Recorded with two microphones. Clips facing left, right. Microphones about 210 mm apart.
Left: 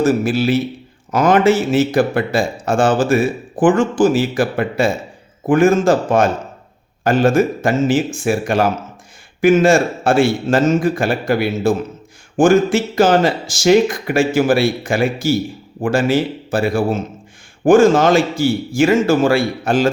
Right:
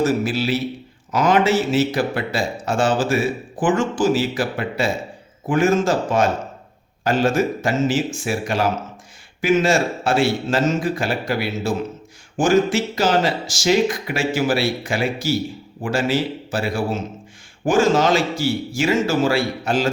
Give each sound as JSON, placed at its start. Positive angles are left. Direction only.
{"t": 0.0, "sound": "a man's voice", "side_deg": 50}